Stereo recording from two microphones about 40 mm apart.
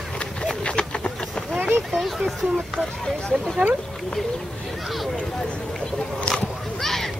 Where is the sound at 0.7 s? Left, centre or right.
Left.